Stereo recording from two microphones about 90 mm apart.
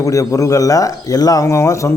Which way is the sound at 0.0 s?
35° left (ahead or behind).